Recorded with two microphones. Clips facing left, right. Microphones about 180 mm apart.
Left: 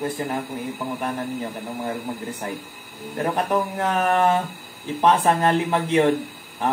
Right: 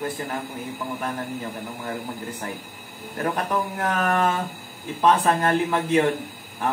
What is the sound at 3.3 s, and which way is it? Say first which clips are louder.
A man's voice: left 3 dB; 20° left (ahead or behind).